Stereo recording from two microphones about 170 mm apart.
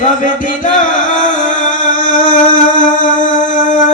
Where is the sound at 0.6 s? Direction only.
50° left (ahead or behind).